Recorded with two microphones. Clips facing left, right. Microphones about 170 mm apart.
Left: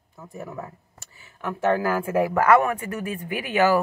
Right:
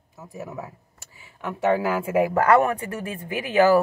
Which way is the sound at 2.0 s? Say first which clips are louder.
Right 3 dB; 15° right (ahead or behind).